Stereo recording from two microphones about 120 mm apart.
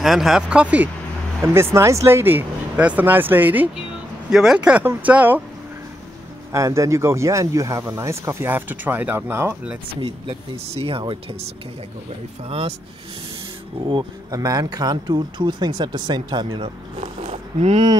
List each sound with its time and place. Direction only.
0.0 s speech: centre (ahead or behind)
1.4 s speech: 20° right (ahead or behind)
6.5 s speech: 25° right (ahead or behind)
9.9 s speech: 50° right (ahead or behind)
12.4 s speech: 55° right (ahead or behind)
14.3 s speech: 30° right (ahead or behind)
16.6 s speech: 60° right (ahead or behind)